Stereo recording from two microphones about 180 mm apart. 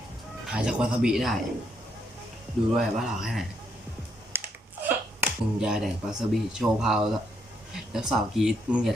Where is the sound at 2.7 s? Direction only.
Centre (ahead or behind).